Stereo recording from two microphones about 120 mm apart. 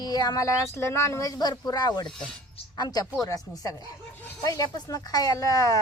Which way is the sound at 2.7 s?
35° left (ahead or behind).